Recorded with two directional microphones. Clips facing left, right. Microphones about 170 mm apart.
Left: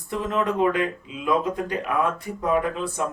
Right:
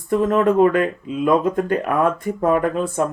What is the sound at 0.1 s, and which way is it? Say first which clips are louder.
Speech: right 8 dB; 50° right (ahead or behind).